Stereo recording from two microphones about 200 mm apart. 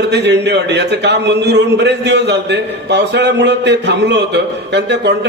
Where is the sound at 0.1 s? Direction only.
60° right (ahead or behind).